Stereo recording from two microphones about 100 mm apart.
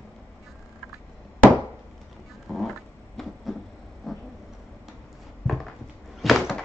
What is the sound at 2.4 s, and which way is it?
Cat, centre (ahead or behind).